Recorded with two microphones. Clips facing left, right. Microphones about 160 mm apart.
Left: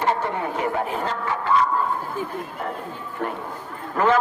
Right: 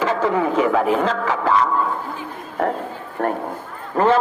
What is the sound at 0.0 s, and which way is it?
Speech, 90° right.